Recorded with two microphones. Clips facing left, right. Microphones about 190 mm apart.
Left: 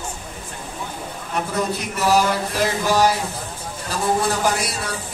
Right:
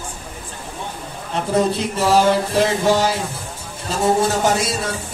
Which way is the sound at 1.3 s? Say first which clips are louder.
Right 5 dB; 30° right (ahead or behind).